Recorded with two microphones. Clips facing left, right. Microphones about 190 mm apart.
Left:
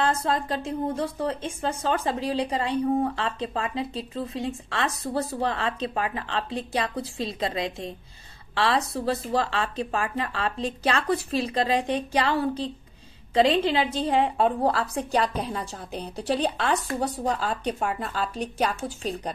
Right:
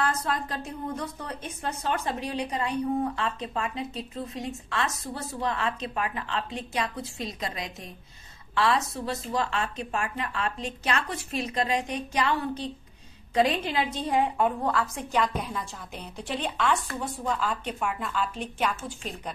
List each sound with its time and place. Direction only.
0.0 s a woman's voice: 25° left (ahead or behind)